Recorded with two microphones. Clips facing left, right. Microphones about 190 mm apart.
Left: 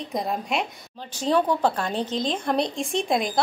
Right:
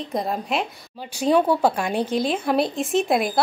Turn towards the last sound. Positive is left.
turn(degrees=-5)  # may be behind; listen again after turning